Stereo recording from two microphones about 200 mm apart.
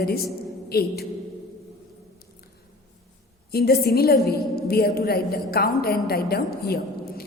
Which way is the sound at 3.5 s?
50° left (ahead or behind).